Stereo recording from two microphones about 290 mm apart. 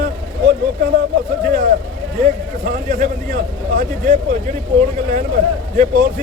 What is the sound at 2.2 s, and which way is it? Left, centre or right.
Speech, right.